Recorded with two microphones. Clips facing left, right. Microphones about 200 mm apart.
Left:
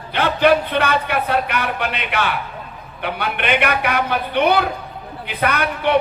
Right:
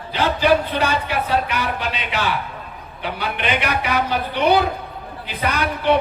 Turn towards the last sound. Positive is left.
turn(degrees=60)  # may be behind; listen again after turning